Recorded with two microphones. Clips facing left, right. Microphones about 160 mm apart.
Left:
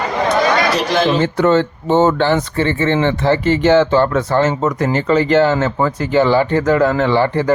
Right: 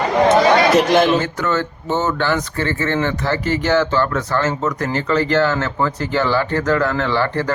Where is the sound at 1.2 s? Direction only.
20° left (ahead or behind).